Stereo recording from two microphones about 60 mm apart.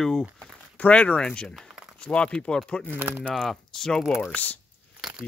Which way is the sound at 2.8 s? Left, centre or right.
Right.